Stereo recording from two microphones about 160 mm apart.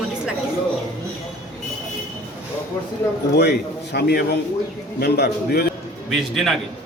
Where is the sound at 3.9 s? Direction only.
90° left.